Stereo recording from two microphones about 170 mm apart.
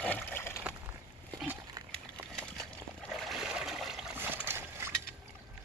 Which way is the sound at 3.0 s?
Centre (ahead or behind).